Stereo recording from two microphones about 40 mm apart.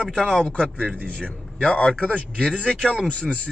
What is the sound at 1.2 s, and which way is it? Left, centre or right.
Speech, left.